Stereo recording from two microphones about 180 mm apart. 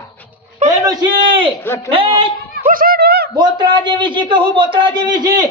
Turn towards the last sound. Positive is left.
turn(degrees=-25)  # may be behind; listen again after turning